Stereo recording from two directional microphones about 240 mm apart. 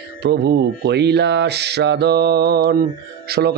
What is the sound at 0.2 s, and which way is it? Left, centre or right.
A man's voice, right.